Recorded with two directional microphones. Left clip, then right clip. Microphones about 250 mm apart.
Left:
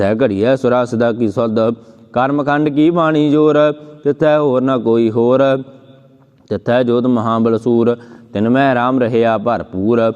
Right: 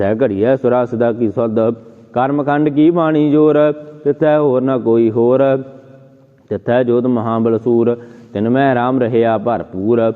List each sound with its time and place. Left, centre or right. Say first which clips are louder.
0.0 s a man's voice: even; left